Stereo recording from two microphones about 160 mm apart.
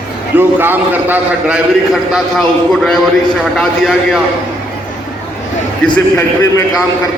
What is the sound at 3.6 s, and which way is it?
Speech, centre (ahead or behind).